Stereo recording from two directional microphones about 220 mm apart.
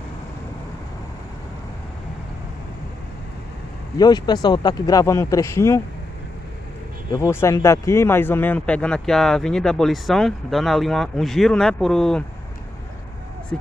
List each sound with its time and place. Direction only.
4.0 s speech: 20° left (ahead or behind)
7.1 s speech: 10° left (ahead or behind)
13.5 s speech: 5° left (ahead or behind)